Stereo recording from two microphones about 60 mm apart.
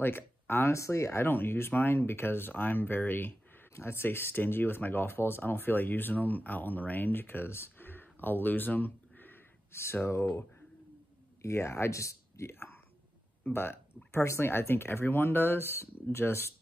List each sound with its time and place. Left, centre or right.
0.0 s speech: left
0.7 s speech: left
1.2 s speech: left
11.4 s speech: left
12.5 s a sound: left
13.4 s speech: left